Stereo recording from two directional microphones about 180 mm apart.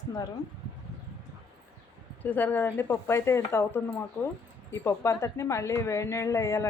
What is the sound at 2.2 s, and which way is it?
A woman's voice, 10° left (ahead or behind).